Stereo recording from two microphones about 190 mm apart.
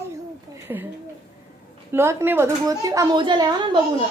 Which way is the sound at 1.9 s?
15° right (ahead or behind).